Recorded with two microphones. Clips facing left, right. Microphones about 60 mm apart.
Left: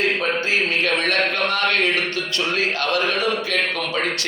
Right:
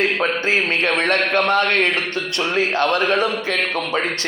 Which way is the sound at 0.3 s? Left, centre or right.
Right.